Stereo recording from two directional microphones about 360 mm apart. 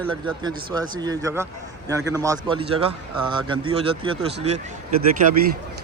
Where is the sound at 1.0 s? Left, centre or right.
Centre.